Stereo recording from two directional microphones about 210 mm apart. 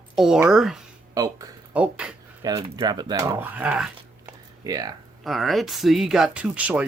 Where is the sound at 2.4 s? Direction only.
20° right (ahead or behind).